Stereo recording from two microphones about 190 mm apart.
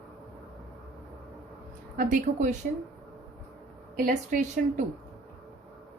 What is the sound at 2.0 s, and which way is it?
Speech, 45° right (ahead or behind).